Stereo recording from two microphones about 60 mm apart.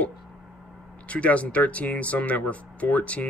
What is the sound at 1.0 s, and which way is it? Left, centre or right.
Speech, left.